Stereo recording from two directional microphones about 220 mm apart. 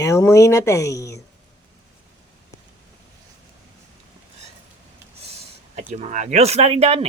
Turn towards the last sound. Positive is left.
turn(degrees=-25)  # may be behind; listen again after turning